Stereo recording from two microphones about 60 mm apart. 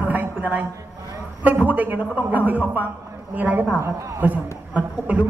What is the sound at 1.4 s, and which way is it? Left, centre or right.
A man's voice, right.